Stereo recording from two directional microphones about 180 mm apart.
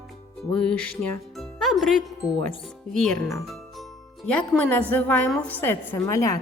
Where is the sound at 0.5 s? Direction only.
5° left (ahead or behind).